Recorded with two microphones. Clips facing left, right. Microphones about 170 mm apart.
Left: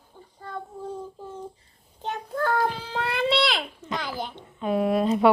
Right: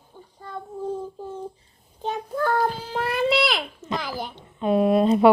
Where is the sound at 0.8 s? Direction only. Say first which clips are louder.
Right 5 dB; 30° right (ahead or behind).